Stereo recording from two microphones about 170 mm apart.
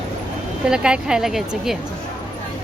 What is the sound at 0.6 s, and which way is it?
Speech, 5° right (ahead or behind).